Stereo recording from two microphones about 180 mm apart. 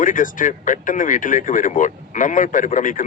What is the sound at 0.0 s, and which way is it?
Speech, 45° left (ahead or behind).